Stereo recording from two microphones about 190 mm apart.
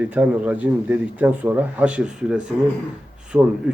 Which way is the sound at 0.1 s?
5° right (ahead or behind).